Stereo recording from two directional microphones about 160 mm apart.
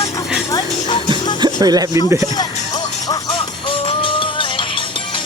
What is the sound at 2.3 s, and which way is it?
Music, 25° left (ahead or behind).